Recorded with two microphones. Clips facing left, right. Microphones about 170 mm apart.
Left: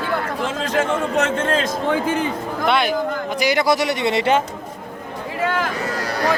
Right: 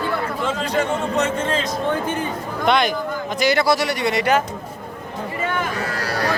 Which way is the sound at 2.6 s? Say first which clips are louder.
Even; 5° left (ahead or behind).